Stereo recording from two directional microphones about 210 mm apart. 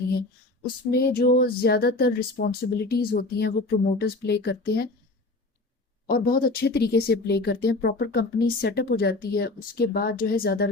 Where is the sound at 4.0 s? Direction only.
50° left (ahead or behind).